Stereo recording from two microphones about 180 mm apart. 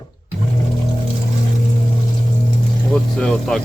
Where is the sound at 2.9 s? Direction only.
5° left (ahead or behind).